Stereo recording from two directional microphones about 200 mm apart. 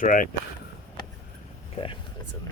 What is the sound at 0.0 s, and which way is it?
Speech, 45° left (ahead or behind).